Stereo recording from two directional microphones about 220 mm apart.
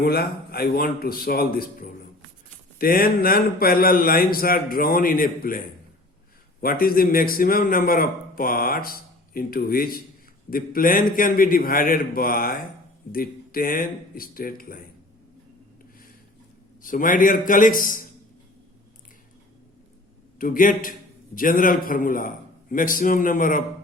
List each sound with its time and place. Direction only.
0.0 s a man's voice: 45° left (ahead or behind)
16.8 s a man's voice: 40° left (ahead or behind)
20.4 s a man's voice: 40° left (ahead or behind)